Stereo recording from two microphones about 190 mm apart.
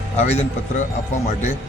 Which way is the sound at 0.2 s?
35° left (ahead or behind).